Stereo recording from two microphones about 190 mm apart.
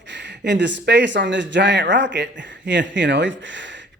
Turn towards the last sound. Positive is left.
turn(degrees=-70)  # may be behind; listen again after turning